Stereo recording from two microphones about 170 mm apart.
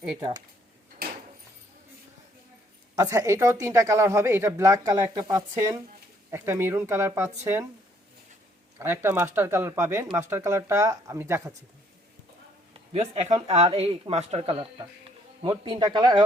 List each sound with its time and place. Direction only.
0.2 s speech: 25° right (ahead or behind)
2.9 s speech: 20° right (ahead or behind)
8.8 s speech: 15° right (ahead or behind)
12.9 s speech: 40° right (ahead or behind)